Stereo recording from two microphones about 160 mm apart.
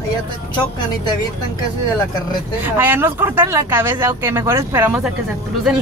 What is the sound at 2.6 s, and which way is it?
Speech, 10° right (ahead or behind).